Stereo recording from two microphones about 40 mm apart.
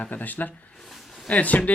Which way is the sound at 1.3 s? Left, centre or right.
Left.